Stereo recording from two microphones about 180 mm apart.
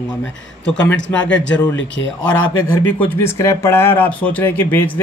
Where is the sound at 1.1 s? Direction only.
5° left (ahead or behind).